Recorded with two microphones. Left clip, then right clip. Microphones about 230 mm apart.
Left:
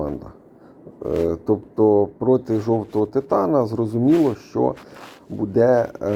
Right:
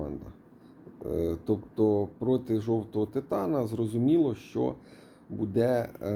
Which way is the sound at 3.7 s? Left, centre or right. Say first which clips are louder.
Left 8 dB; left.